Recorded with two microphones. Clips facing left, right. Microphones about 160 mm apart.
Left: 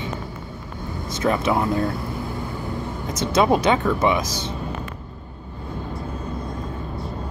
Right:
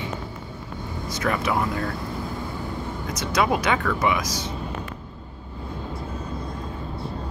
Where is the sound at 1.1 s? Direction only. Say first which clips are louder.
Left 4 dB; 25° left (ahead or behind).